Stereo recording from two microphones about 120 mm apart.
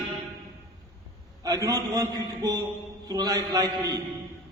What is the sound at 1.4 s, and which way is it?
A man's voice, 30° right (ahead or behind).